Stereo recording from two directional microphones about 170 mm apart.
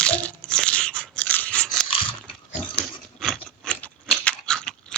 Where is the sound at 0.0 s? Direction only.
10° left (ahead or behind).